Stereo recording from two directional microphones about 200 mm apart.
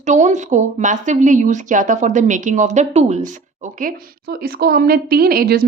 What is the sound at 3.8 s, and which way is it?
A woman's voice, 45° right (ahead or behind).